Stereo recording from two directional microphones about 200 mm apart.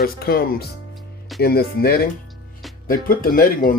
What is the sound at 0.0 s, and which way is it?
Speech, 50° left (ahead or behind).